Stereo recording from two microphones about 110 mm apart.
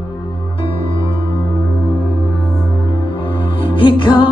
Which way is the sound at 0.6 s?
55° left (ahead or behind).